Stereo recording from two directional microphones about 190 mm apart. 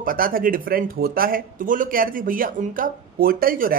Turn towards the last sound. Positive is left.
turn(degrees=-50)  # may be behind; listen again after turning